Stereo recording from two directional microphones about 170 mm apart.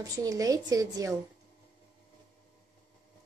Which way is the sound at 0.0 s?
20° right (ahead or behind).